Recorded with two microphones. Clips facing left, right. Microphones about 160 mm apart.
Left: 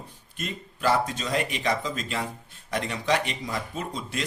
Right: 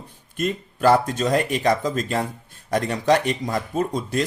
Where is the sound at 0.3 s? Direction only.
45° right (ahead or behind).